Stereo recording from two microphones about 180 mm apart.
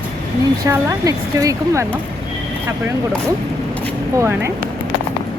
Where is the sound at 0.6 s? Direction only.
20° right (ahead or behind).